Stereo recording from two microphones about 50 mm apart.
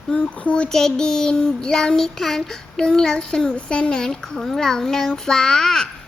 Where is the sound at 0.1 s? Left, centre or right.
Left.